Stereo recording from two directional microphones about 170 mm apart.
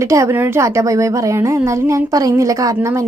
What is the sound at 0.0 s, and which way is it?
A woman's voice, 15° right (ahead or behind).